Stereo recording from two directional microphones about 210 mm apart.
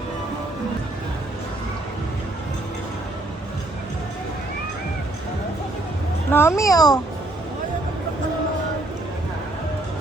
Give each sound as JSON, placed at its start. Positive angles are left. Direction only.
{"t": 6.3, "sound": "a child's voice", "side_deg": 15}